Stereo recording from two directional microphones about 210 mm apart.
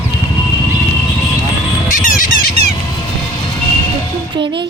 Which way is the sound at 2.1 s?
40° left (ahead or behind).